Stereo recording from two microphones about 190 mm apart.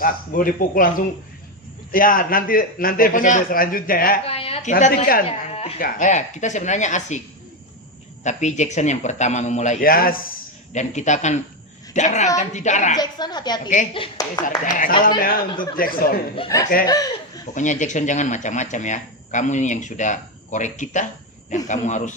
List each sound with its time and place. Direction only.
0.0 s a man's voice: 45° left (ahead or behind)
4.3 s a sound: 30° left (ahead or behind)
4.7 s a man's voice: 45° left (ahead or behind)
5.2 s speech: 30° left (ahead or behind)
8.2 s speech: 40° left (ahead or behind)
13.0 s a woman's voice: 20° left (ahead or behind)
14.6 s a man's voice: 45° left (ahead or behind)
16.8 s chuckle: 20° left (ahead or behind)
17.5 s speech: 40° left (ahead or behind)